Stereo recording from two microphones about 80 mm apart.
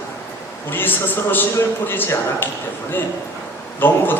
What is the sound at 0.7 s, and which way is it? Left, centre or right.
A man's voice, left.